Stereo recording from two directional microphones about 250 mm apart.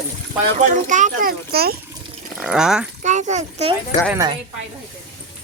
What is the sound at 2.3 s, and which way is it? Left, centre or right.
Speech, centre.